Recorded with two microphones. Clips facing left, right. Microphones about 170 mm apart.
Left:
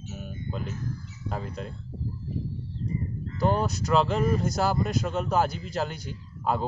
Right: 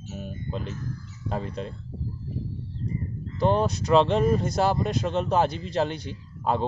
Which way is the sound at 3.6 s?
25° right (ahead or behind).